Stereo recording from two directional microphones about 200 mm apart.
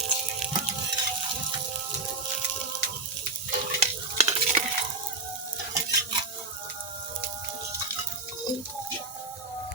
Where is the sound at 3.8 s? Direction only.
30° right (ahead or behind).